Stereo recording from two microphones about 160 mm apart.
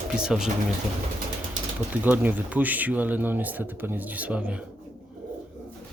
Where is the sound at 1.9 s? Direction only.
10° right (ahead or behind).